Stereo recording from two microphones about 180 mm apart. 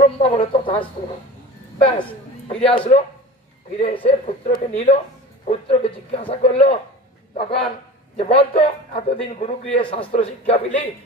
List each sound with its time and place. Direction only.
0.0 s speech: 35° left (ahead or behind)
2.4 s a man's voice: 30° left (ahead or behind)
9.8 s a man's voice: 25° left (ahead or behind)